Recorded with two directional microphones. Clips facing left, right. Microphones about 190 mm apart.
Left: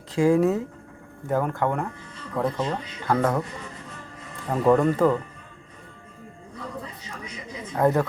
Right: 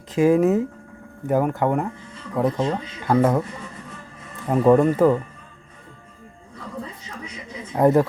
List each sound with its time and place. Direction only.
0.1 s speech: 20° right (ahead or behind)
4.4 s speech: 20° right (ahead or behind)
7.8 s speech: 15° right (ahead or behind)